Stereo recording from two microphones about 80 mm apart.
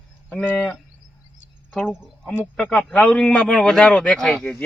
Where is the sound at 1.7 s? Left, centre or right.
Centre.